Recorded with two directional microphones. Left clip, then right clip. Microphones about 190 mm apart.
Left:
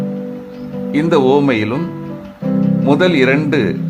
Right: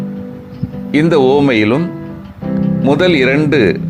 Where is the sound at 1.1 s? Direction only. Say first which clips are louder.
Right 1 dB; 20° right (ahead or behind).